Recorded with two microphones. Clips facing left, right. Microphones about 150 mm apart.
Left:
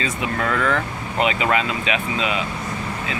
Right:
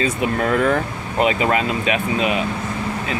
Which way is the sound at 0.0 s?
35° right (ahead or behind).